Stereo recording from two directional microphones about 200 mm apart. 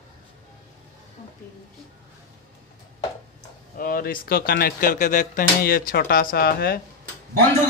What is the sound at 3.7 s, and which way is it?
Speech, 45° left (ahead or behind).